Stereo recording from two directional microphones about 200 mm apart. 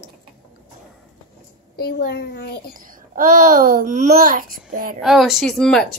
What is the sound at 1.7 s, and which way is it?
Speech, 50° left (ahead or behind).